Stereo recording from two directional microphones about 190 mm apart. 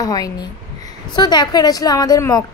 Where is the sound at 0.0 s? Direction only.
20° left (ahead or behind).